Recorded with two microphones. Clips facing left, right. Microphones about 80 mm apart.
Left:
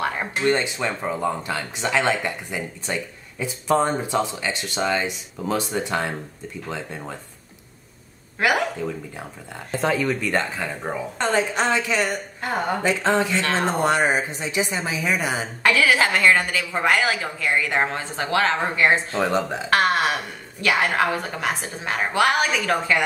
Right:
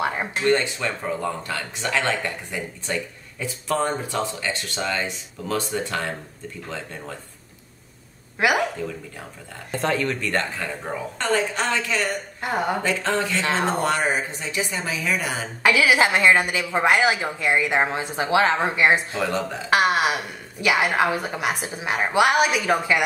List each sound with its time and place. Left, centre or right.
0.5 s speech: centre
8.4 s a woman's voice: centre
9.7 s a woman's voice: centre
12.4 s a woman's voice: centre
12.8 s a woman's voice: centre
13.4 s a woman's voice: centre
13.7 s a woman's voice: left
15.6 s a woman's voice: centre